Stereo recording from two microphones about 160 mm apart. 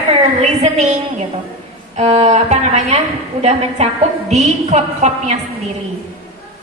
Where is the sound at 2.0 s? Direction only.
45° right (ahead or behind).